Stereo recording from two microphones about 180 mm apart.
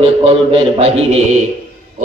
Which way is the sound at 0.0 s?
30° right (ahead or behind).